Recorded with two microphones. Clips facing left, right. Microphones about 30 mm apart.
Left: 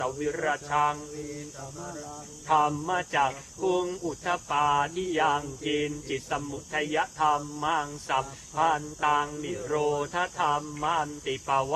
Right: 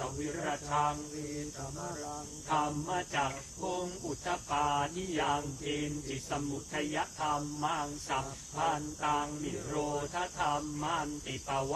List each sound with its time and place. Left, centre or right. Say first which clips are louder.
0.0 s speech: left 8 dB; left
0.4 s cricket: left 6 dB; left
1.1 s mantra: left 2 dB; centre
2.6 s cricket: left 7 dB; left
3.2 s speech: left 8 dB; left
4.3 s cricket: left 7 dB; left
5.0 s cricket: left 7 dB; left
6.7 s speech: left 8 dB; left
7.0 s cricket: left 8 dB; left
8.5 s speech: left 8 dB; left
9.0 s cricket: left 7 dB; left
10.4 s a sound: left 5 dB; centre
10.8 s speech: left 7 dB; left